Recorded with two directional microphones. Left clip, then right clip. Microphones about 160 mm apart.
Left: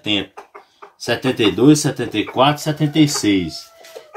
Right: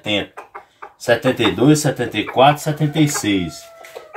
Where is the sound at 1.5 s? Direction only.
25° right (ahead or behind).